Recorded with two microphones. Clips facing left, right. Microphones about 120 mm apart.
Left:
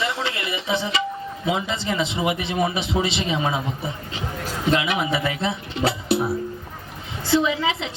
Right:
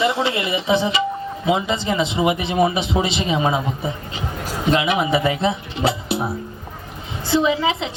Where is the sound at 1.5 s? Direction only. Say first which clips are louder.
Right 4 dB; 20° right (ahead or behind).